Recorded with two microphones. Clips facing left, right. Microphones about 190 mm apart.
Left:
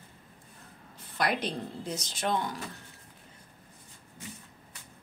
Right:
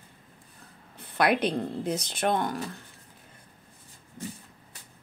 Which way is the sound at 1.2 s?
60° right (ahead or behind).